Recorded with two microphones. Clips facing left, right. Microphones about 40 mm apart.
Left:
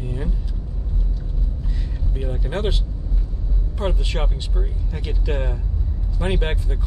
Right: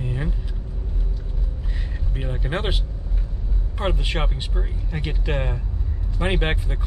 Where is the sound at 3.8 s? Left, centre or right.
Right.